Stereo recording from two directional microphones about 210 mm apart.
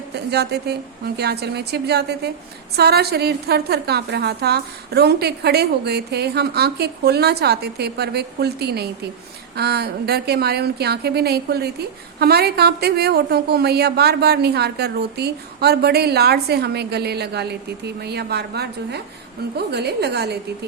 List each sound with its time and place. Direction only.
0.3 s a woman's voice: 50° right (ahead or behind)